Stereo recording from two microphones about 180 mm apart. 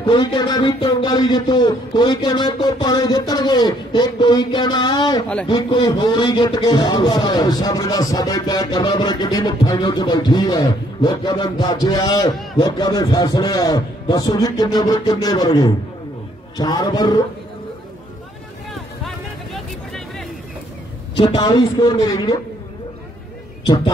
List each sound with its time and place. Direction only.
0.0 s music: 25° left (ahead or behind)
19.0 s vehicle: centre (ahead or behind)
21.2 s music: 20° left (ahead or behind)